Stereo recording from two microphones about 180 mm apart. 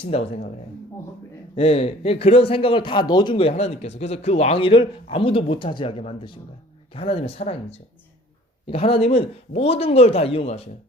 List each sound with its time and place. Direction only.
0.0 s a man's voice: 35° left (ahead or behind)
1.5 s a man's voice: 35° left (ahead or behind)